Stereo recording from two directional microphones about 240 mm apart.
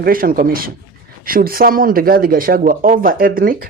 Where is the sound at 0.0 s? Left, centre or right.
Right.